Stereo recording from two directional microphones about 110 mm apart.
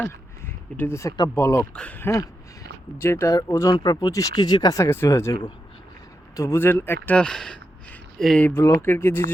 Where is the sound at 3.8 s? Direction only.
40° left (ahead or behind).